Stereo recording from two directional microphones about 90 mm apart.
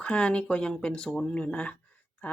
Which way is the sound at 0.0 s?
10° left (ahead or behind).